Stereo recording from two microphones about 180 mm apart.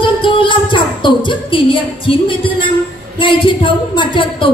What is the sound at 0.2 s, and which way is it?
Music, 25° left (ahead or behind).